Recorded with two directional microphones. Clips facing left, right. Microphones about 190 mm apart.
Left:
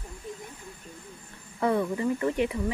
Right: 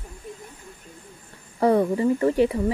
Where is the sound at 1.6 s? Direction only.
35° right (ahead or behind).